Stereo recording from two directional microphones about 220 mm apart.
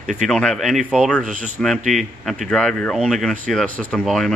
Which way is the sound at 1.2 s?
35° right (ahead or behind).